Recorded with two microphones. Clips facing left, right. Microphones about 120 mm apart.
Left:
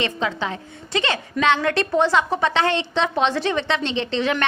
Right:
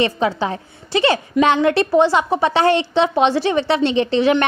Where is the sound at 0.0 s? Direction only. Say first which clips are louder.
Right 6 dB; 30° right (ahead or behind).